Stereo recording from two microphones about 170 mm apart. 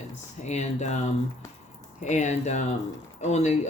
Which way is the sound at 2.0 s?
45° left (ahead or behind).